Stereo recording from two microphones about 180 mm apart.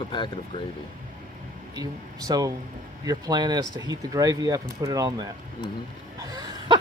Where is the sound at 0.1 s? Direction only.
25° left (ahead or behind).